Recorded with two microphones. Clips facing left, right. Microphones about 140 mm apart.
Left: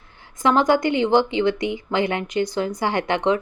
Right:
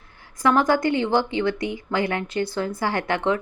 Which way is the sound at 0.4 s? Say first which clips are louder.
Left 1 dB; 20° left (ahead or behind).